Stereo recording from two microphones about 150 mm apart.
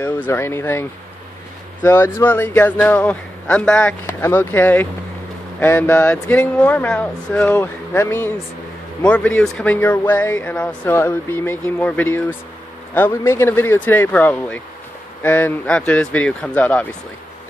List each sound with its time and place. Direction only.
0.0 s speech: 15° left (ahead or behind)
4.0 s speech: 15° left (ahead or behind)